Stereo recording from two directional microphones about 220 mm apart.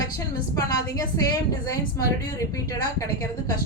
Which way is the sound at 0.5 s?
15° left (ahead or behind).